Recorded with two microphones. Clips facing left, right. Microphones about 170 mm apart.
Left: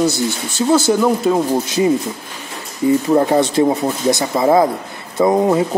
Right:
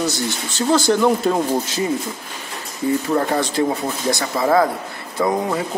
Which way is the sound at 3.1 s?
20° left (ahead or behind).